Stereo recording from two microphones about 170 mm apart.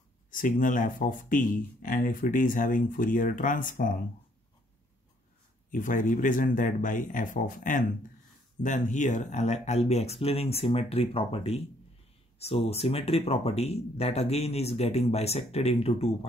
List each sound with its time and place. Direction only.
0.3 s speech: 50° left (ahead or behind)
5.7 s speech: 50° left (ahead or behind)